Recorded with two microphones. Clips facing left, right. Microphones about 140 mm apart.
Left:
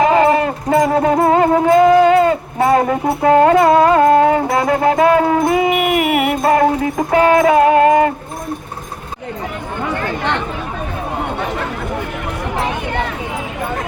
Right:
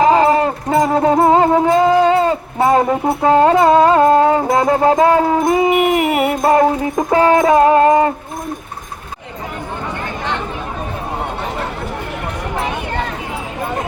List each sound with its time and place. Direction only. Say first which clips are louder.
0.0 s music: right 1 dB; 30° right (ahead or behind)